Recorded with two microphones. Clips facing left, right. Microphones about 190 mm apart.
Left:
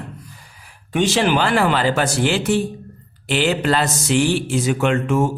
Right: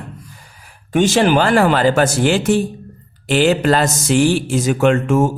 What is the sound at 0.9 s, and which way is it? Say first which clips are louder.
Speech: right 4 dB; 45° right (ahead or behind).